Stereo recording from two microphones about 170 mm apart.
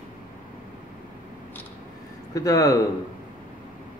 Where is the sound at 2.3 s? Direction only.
20° left (ahead or behind).